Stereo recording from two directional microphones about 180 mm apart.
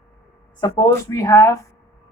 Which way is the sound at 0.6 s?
20° left (ahead or behind).